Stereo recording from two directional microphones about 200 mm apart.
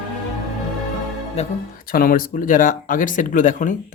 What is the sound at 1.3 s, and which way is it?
Speech, 40° left (ahead or behind).